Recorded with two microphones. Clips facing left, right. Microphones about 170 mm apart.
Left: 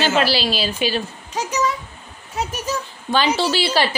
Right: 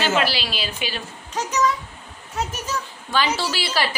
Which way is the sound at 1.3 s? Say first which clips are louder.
Even; 10° left (ahead or behind).